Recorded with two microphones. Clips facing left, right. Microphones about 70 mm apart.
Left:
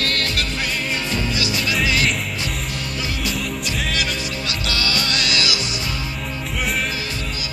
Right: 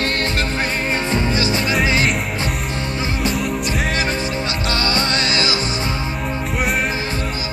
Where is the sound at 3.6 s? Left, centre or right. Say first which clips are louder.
Right 4 dB; right.